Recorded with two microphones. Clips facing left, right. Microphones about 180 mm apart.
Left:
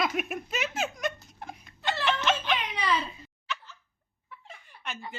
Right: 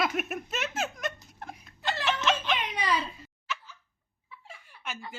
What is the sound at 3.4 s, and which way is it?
Dog, 10° right (ahead or behind).